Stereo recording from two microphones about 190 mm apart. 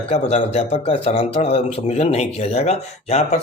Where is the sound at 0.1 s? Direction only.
35° left (ahead or behind).